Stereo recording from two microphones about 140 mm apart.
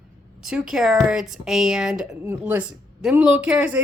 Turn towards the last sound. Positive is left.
turn(degrees=-10)  # may be behind; listen again after turning